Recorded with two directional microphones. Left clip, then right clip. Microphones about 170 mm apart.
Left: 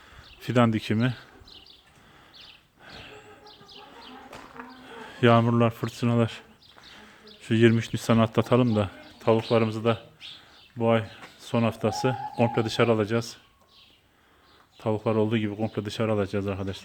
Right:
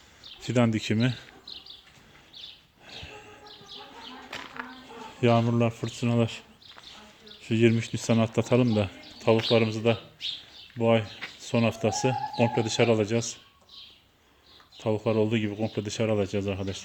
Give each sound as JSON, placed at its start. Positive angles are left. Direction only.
{"t": 0.4, "sound": "speech", "side_deg": 15}
{"t": 2.8, "sound": "dog", "side_deg": 0}
{"t": 5.1, "sound": "speech", "side_deg": 30}
{"t": 14.8, "sound": "speech", "side_deg": 10}